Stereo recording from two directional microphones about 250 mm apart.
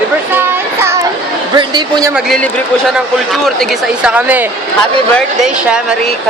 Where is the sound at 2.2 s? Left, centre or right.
Centre.